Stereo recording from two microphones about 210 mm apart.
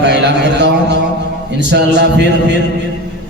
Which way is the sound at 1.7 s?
55° right (ahead or behind).